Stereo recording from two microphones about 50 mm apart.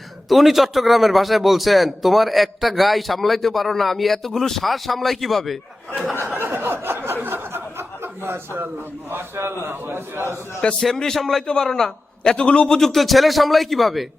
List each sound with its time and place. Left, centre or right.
0.3 s a man's voice: centre
6.2 s a sound: right
7.2 s chuckle: right
9.4 s a man's voice: right
10.8 s a man's voice: centre